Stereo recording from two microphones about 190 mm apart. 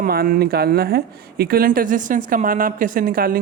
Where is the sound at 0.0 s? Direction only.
50° right (ahead or behind).